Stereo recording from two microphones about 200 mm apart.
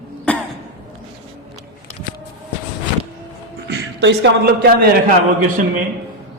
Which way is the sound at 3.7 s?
60° right (ahead or behind).